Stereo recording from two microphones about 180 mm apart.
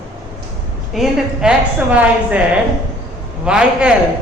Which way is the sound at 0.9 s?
5° right (ahead or behind).